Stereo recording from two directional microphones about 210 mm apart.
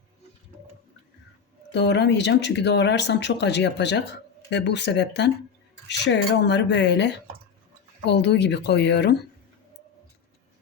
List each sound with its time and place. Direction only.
1.7 s speech: 55° left (ahead or behind)